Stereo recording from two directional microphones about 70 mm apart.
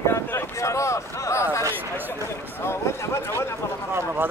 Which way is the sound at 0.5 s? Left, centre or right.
Left.